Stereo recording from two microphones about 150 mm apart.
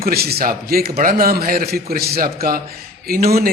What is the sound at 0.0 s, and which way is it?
A man's voice, 90° right.